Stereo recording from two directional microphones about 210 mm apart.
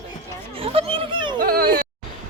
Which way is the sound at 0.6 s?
25° right (ahead or behind).